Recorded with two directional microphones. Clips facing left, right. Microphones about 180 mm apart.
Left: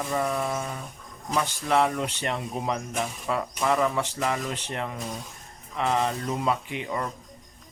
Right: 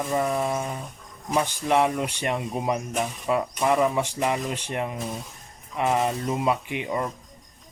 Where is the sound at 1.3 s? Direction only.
20° right (ahead or behind).